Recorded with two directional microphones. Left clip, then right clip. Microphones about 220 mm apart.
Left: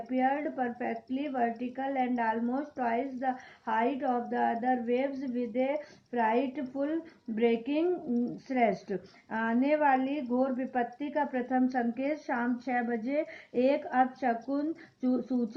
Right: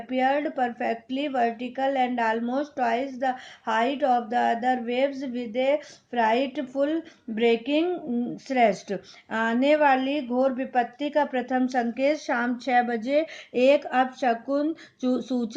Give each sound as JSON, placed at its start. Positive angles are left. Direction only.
{"t": 0.1, "sound": "a woman's voice", "side_deg": -45}